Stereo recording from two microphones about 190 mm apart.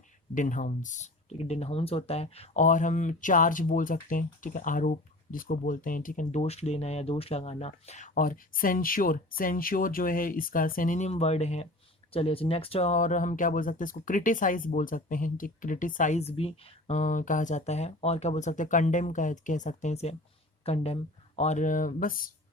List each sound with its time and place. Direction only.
0.3 s speech: 40° left (ahead or behind)